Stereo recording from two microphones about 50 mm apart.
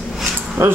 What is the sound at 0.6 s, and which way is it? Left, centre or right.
Speech, right.